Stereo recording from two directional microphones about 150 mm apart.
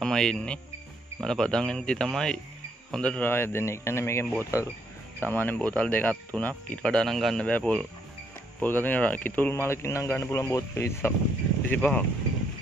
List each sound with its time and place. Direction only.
0.0 s speech: 5° left (ahead or behind)